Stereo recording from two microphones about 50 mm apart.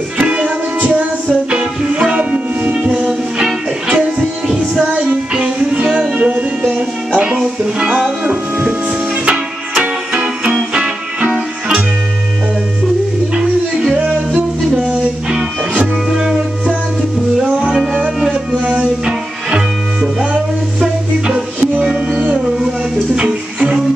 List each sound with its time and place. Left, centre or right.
0.2 s music: right
1.5 s music: centre
2.1 s music: right
4.2 s music: centre
5.3 s music: centre
9.8 s music: centre
16.1 s music: centre
22.2 s music: centre